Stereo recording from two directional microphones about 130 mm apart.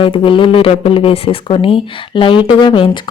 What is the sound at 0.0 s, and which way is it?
A woman's voice, 40° left (ahead or behind).